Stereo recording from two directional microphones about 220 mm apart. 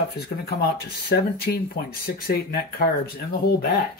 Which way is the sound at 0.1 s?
45° left (ahead or behind).